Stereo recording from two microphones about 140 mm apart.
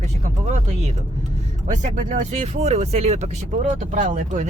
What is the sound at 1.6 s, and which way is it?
Speech, 60° right (ahead or behind).